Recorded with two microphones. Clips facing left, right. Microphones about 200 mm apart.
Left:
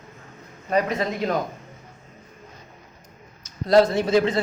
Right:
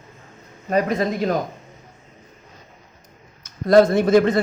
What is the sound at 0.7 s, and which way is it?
Speech, 45° right (ahead or behind).